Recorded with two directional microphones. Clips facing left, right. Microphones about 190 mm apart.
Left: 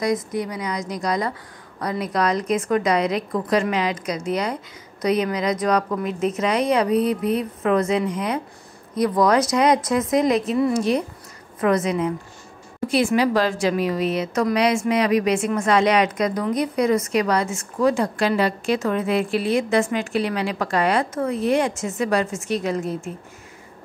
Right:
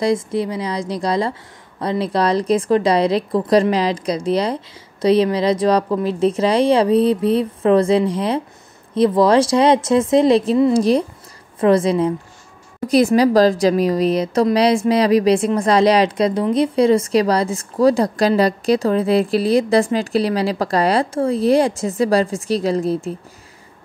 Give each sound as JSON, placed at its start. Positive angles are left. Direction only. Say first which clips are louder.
{"t": 0.0, "sound": "speech", "louder": "right 4 dB", "side_deg": -30}